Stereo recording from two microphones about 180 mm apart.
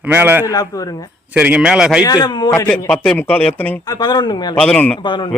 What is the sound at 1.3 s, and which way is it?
Speech, 5° right (ahead or behind).